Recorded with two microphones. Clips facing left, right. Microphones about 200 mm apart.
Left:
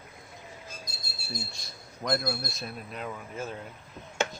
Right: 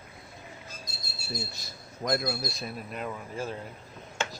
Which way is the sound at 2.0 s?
5° right (ahead or behind).